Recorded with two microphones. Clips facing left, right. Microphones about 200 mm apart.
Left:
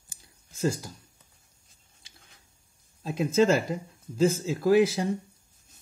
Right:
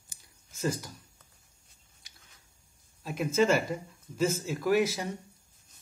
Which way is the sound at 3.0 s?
30° left (ahead or behind).